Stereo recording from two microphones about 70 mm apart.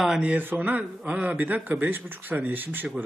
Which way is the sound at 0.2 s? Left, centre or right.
Centre.